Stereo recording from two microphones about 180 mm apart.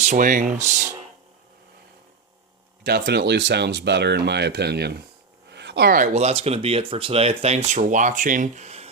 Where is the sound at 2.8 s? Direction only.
70° right (ahead or behind).